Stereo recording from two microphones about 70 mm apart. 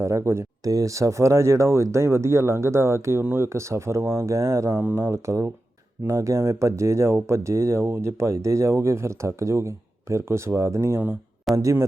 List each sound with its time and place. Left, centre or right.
0.0 s speech: right
0.6 s speech: right
5.1 s speech: right